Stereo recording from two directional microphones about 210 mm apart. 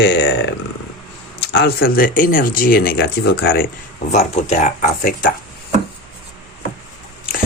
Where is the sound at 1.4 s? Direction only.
50° left (ahead or behind).